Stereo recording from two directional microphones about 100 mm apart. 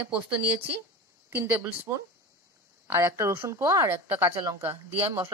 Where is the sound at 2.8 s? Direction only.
25° right (ahead or behind).